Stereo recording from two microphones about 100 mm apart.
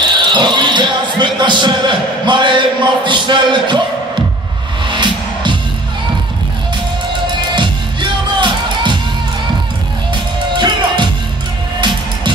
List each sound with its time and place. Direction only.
0.0 s speech: 50° right (ahead or behind)
4.8 s music: 50° right (ahead or behind)
7.5 s music: 50° right (ahead or behind)
10.5 s music: 50° right (ahead or behind)